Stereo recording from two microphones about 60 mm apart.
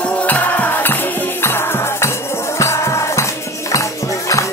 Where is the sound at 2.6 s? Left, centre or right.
Left.